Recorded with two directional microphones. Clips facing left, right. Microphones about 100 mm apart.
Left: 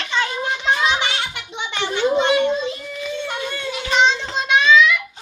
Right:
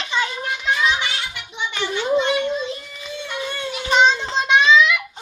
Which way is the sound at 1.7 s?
25° left (ahead or behind).